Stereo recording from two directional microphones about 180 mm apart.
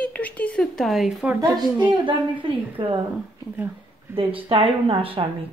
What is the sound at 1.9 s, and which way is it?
A woman's voice, 30° right (ahead or behind).